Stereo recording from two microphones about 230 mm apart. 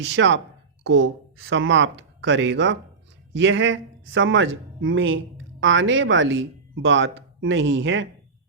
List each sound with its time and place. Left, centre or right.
0.2 s speech: right